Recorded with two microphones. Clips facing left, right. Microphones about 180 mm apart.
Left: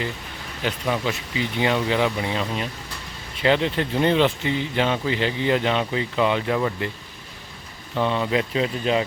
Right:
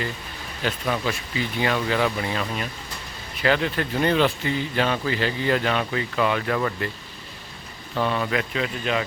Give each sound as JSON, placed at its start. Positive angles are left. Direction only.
{"t": 0.6, "sound": "a man's voice", "side_deg": 15}
{"t": 7.9, "sound": "speech", "side_deg": 20}